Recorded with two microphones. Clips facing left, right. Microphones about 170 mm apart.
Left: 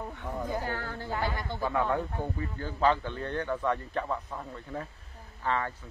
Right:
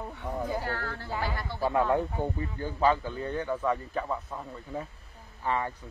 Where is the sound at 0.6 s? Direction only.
15° left (ahead or behind).